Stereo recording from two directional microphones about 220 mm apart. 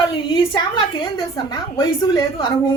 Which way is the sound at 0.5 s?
20° left (ahead or behind).